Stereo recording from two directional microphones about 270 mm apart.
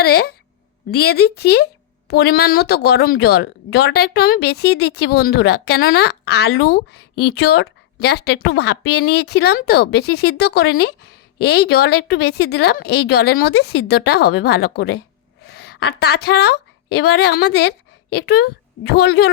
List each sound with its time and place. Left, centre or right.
0.0 s a woman's voice: left